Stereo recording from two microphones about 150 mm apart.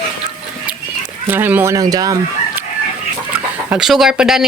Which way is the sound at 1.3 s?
15° right (ahead or behind).